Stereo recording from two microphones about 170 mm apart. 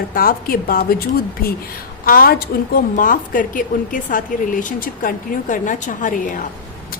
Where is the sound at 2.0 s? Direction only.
60° left (ahead or behind).